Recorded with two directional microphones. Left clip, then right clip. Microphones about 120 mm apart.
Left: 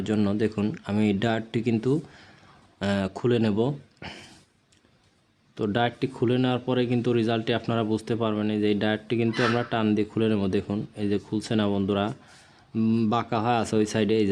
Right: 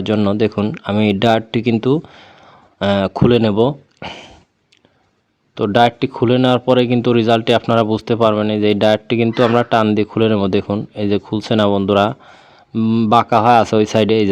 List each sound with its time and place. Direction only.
0.0 s speech: 25° right (ahead or behind)
5.5 s speech: 35° right (ahead or behind)
12.7 s speech: 20° right (ahead or behind)
13.1 s speech: 35° right (ahead or behind)